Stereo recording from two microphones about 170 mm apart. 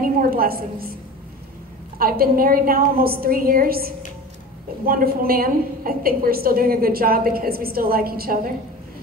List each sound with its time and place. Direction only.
0.0 s a woman's voice: 60° right (ahead or behind)
2.0 s a woman's voice: 60° right (ahead or behind)